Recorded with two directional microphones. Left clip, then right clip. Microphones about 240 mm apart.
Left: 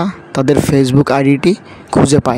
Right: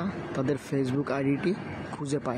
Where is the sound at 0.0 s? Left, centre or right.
Left.